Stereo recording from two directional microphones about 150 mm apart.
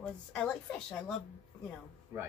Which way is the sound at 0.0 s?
10° left (ahead or behind).